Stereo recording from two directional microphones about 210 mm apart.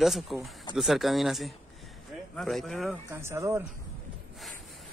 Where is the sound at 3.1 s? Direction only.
10° right (ahead or behind).